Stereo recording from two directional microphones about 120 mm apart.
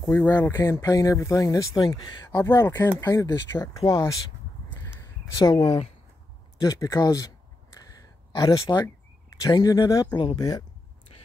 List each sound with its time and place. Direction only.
0.1 s speech: 15° left (ahead or behind)
4.6 s a sound: 20° left (ahead or behind)
6.6 s speech: 30° left (ahead or behind)
8.4 s speech: 35° left (ahead or behind)
11.1 s vehicle: 55° left (ahead or behind)